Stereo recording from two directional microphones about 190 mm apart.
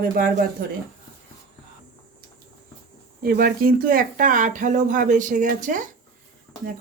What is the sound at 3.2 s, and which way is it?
Speech, 50° right (ahead or behind).